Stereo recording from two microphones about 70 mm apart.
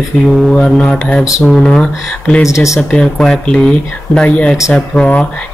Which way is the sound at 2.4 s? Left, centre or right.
Left.